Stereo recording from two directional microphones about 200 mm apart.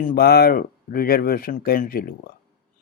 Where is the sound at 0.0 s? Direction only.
45° left (ahead or behind).